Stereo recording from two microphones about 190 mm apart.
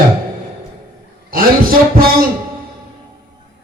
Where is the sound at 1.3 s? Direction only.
50° right (ahead or behind).